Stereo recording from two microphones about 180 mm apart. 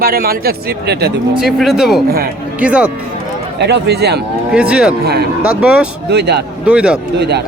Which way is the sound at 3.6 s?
65° right (ahead or behind).